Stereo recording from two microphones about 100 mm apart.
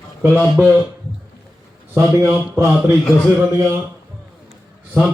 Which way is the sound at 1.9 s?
25° right (ahead or behind).